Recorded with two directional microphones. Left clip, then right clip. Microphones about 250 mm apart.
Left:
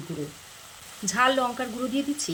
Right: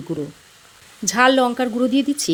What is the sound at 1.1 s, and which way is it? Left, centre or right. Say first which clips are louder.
Speech: right 7 dB; right.